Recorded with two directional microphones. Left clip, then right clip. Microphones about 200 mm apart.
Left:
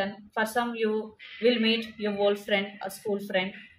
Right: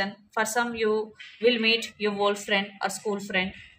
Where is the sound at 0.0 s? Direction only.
40° right (ahead or behind).